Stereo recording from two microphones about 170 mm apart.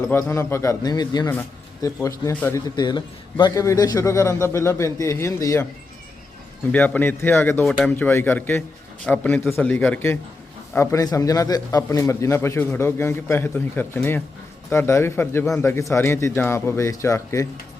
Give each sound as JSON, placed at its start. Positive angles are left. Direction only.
{"t": 0.1, "sound": "a man's voice", "side_deg": 15}
{"t": 1.3, "sound": "a man's voice", "side_deg": 10}
{"t": 6.7, "sound": "a man's voice", "side_deg": 10}
{"t": 7.6, "sound": "a man's voice", "side_deg": 0}